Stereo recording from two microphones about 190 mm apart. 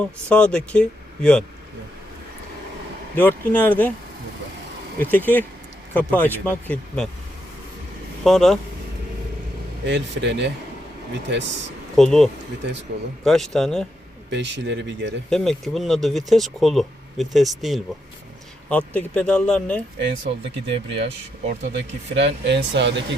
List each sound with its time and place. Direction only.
0.0 s speech: 5° left (ahead or behind)
3.2 s speech: 10° left (ahead or behind)
4.9 s speech: 10° left (ahead or behind)
8.2 s speech: centre (ahead or behind)
9.8 s speech: 70° right (ahead or behind)
11.9 s speech: centre (ahead or behind)
14.3 s speech: 70° right (ahead or behind)
15.3 s speech: centre (ahead or behind)
20.0 s speech: 70° right (ahead or behind)